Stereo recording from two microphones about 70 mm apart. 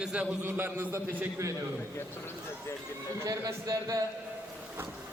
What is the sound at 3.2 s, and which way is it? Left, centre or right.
Speech, right.